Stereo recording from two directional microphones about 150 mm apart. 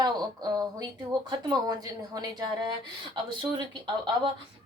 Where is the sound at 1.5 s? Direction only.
25° right (ahead or behind).